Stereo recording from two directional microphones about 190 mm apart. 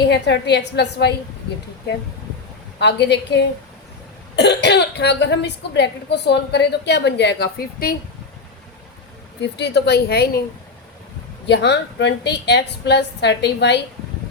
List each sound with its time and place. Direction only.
0.1 s speech: 65° left (ahead or behind)
2.7 s speech: 65° left (ahead or behind)
9.4 s speech: 60° left (ahead or behind)
11.4 s speech: 65° left (ahead or behind)